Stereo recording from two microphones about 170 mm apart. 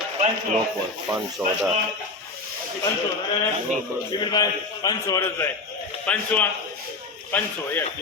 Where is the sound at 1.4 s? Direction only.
5° right (ahead or behind).